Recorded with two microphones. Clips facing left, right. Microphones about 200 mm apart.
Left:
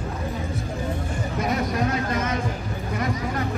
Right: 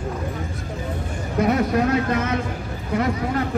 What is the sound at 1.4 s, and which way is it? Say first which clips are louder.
Speech: right 6 dB; 60° right (ahead or behind).